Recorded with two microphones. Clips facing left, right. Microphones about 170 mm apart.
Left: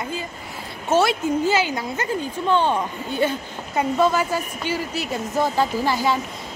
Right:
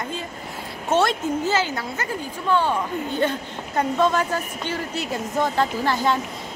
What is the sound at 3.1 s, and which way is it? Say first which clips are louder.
Speech: left 3 dB; 5° left (ahead or behind).